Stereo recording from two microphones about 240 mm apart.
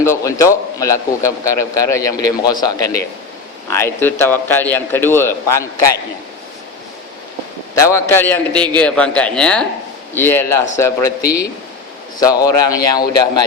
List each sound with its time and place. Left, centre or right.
0.0 s a man's voice: centre
7.8 s a man's voice: centre